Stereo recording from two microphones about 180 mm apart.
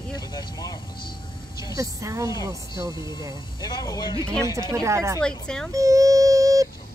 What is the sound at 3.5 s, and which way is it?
Speech, 20° left (ahead or behind).